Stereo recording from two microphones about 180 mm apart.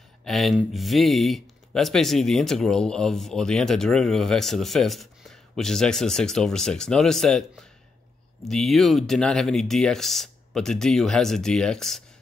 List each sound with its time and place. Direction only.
0.2 s speech: centre (ahead or behind)